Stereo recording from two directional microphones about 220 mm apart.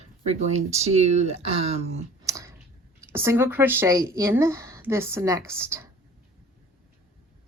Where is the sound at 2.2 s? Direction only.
15° right (ahead or behind).